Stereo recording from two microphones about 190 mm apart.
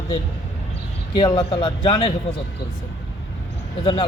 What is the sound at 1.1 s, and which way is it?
A man's voice, 25° left (ahead or behind).